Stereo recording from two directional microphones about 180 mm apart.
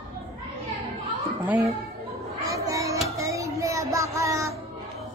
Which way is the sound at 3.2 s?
15° right (ahead or behind).